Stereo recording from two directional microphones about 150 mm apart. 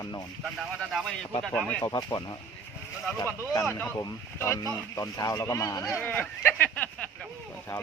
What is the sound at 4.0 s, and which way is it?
Speech, 20° left (ahead or behind).